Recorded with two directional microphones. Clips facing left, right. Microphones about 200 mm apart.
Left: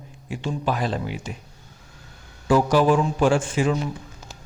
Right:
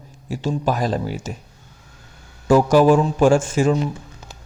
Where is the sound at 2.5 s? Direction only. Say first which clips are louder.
Right 4 dB; 45° right (ahead or behind).